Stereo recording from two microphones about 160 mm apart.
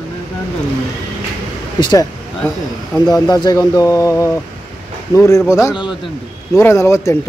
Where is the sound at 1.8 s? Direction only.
25° left (ahead or behind).